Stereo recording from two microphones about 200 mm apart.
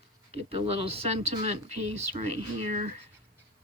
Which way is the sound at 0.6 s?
30° right (ahead or behind).